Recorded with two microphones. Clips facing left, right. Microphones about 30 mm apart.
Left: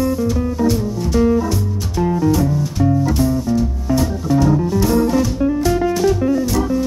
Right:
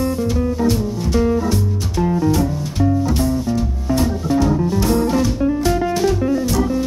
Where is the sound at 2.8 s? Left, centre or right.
Centre.